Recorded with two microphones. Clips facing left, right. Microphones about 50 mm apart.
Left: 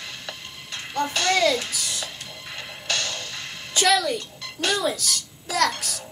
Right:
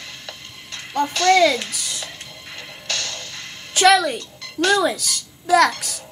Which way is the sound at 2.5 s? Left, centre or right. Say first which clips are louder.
Left 1 dB; centre.